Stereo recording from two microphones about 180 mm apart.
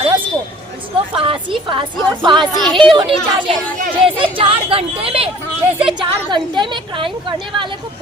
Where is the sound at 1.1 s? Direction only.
30° right (ahead or behind).